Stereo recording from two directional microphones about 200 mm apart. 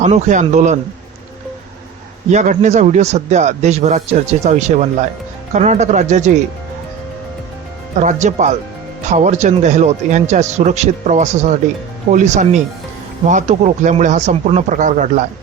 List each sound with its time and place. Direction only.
0.0 s speech: 35° right (ahead or behind)
2.3 s speech: 35° right (ahead or behind)
7.9 s speech: 35° right (ahead or behind)